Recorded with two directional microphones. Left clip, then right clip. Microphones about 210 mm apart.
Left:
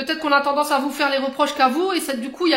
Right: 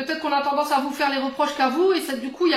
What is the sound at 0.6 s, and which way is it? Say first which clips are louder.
A woman's voice: left 2 dB; 50° left (ahead or behind).